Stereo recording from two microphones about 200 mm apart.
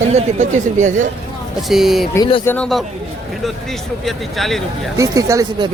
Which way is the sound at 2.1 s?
20° left (ahead or behind).